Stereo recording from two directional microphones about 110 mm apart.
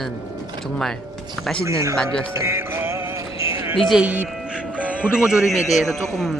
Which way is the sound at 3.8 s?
Centre (ahead or behind).